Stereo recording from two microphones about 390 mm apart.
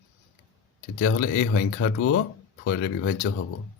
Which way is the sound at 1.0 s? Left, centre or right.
Left.